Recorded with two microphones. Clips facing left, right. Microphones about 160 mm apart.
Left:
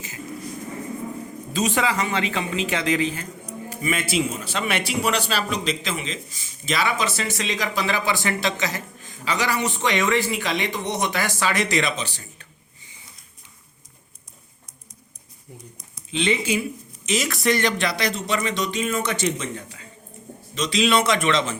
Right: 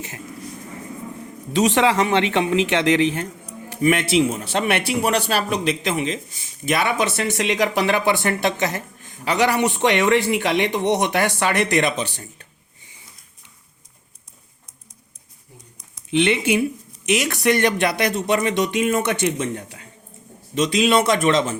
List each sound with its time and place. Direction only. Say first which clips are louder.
1.5 s a man's voice: right 6 dB; 80° right; by 12.2 s 55° right (ahead or behind)
15.5 s a sound: left 4 dB; 20° right (ahead or behind)
16.1 s a man's voice: right 5 dB; 70° right (ahead or behind)
20.6 s a man's voice: right 3 dB; 50° right (ahead or behind)